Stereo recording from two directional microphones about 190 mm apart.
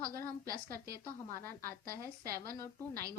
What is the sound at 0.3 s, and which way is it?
A woman's voice, 50° right (ahead or behind).